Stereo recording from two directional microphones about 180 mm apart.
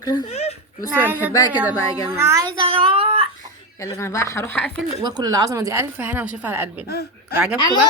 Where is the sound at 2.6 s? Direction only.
30° right (ahead or behind).